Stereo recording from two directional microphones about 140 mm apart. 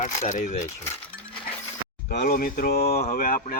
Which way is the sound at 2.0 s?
90° left.